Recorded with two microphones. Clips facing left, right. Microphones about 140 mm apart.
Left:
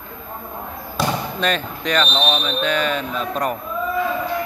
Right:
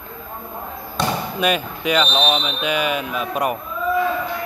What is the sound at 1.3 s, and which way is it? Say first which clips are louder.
Speech: right 2 dB; 10° right (ahead or behind).